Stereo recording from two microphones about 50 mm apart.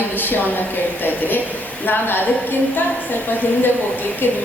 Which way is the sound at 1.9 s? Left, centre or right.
Left.